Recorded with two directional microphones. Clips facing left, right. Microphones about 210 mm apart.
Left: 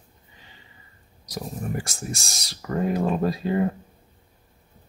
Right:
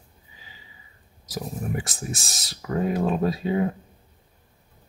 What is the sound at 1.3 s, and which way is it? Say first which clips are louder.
Speech: right 1 dB; centre (ahead or behind).